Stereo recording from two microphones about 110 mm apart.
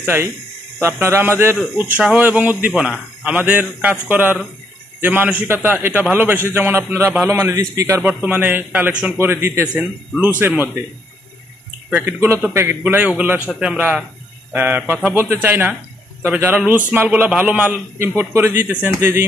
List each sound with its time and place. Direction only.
0.0 s a man's voice: 20° right (ahead or behind)
8.0 s a man's voice: 15° right (ahead or behind)
11.9 s a man's voice: 20° right (ahead or behind)
13.5 s a man's voice: 5° right (ahead or behind)
14.5 s a man's voice: 15° right (ahead or behind)